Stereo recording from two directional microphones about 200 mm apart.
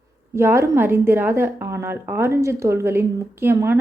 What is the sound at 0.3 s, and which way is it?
A woman's voice, 10° right (ahead or behind).